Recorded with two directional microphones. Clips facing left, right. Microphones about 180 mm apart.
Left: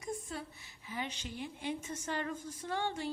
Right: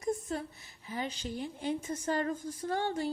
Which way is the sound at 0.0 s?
40° right (ahead or behind).